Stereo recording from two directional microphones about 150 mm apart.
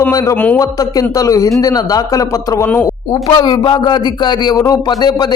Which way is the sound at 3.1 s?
30° left (ahead or behind).